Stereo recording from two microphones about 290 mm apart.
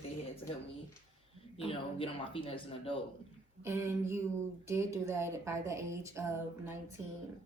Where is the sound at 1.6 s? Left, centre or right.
Centre.